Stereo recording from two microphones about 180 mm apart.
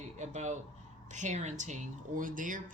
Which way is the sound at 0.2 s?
40° right (ahead or behind).